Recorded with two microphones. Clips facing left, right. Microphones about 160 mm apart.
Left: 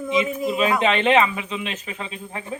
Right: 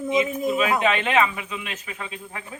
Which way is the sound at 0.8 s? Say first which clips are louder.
Left 3 dB; 25° left (ahead or behind).